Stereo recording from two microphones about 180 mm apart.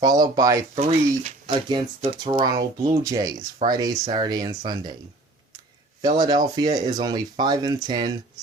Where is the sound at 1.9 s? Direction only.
30° right (ahead or behind).